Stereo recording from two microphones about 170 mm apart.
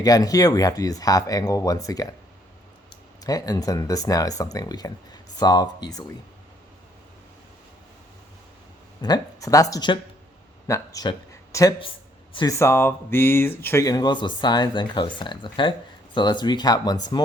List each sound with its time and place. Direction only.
0.0 s speech: 20° left (ahead or behind)
3.2 s speech: 20° left (ahead or behind)
9.0 s speech: 25° left (ahead or behind)
12.5 s speech: 15° left (ahead or behind)